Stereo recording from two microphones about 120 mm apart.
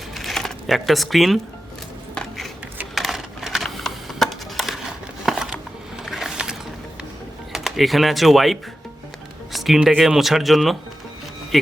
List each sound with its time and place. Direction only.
0.1 s typewriter: centre (ahead or behind)
2.9 s a sound: centre (ahead or behind)
7.5 s speech: centre (ahead or behind)